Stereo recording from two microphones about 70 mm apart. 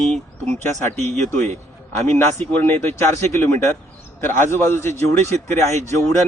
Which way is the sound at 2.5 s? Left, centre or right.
Left.